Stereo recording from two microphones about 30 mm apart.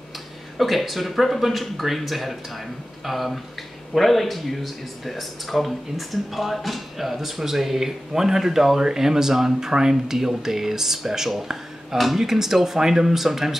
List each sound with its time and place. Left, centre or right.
0.6 s speech: centre